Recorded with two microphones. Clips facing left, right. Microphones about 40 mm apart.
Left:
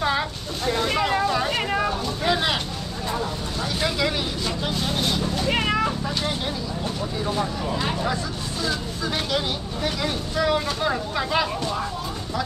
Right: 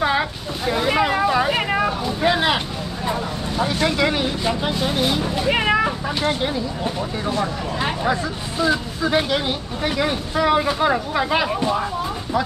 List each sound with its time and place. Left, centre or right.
0.0 s vehicle: centre
3.1 s speech: right